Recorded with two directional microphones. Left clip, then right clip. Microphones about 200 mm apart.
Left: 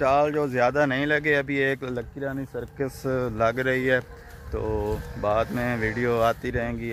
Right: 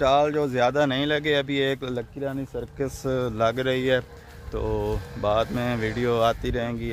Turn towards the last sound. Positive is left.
turn(degrees=-5)  # may be behind; listen again after turning